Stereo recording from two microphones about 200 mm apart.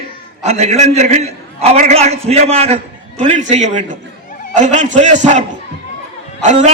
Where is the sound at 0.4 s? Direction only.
35° right (ahead or behind).